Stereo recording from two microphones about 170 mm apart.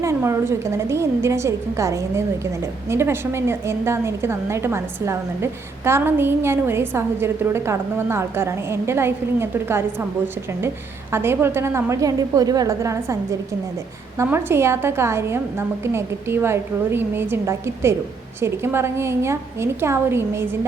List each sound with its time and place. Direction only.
0.0 s a woman's voice: 15° right (ahead or behind)
11.1 s a woman's voice: 15° right (ahead or behind)
14.2 s a woman's voice: 15° right (ahead or behind)